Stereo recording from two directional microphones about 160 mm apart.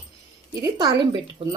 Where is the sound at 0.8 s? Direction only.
30° right (ahead or behind).